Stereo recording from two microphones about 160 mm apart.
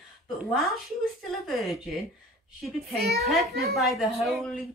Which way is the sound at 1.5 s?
Centre (ahead or behind).